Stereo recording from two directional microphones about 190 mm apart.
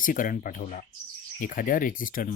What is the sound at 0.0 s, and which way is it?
Speech, 45° left (ahead or behind).